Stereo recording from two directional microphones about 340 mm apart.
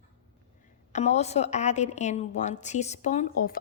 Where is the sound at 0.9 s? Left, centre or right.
Centre.